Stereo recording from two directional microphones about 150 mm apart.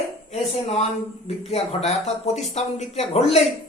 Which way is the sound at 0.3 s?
45° left (ahead or behind).